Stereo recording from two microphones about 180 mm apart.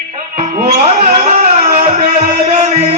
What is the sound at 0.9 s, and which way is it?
Music, 40° right (ahead or behind).